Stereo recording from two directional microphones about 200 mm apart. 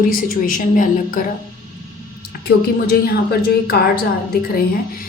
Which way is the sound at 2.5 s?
50° left (ahead or behind).